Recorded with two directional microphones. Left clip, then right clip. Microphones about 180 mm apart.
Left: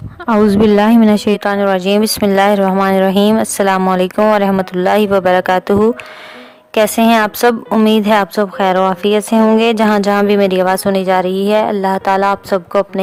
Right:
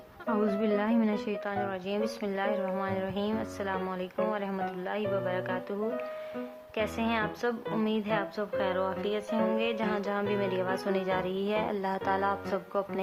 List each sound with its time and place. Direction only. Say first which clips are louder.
0.3 s speech: left 18 dB; 45° left (ahead or behind)